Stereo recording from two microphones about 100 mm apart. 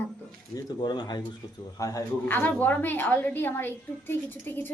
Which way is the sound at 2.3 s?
15° left (ahead or behind).